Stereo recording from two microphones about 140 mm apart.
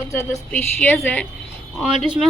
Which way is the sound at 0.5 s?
10° left (ahead or behind).